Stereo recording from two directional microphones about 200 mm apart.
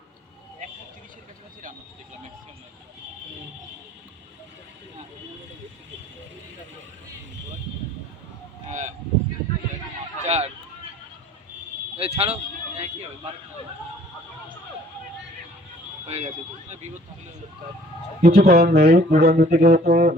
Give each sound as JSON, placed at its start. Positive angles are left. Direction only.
{"t": 8.7, "sound": "a sound", "side_deg": -35}
{"t": 10.2, "sound": "run", "side_deg": -35}
{"t": 11.9, "sound": "speech", "side_deg": -30}
{"t": 16.0, "sound": "speech", "side_deg": -30}
{"t": 18.2, "sound": "speech", "side_deg": -55}